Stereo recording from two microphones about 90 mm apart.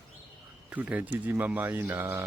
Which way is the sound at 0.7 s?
20° right (ahead or behind).